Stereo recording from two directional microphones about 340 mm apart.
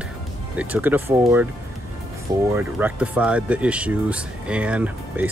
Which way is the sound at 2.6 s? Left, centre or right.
Centre.